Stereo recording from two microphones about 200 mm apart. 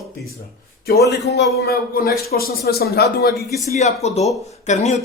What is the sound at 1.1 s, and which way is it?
Speech, 60° left (ahead or behind).